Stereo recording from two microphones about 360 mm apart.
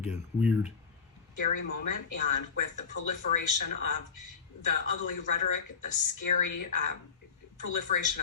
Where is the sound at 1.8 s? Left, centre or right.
Left.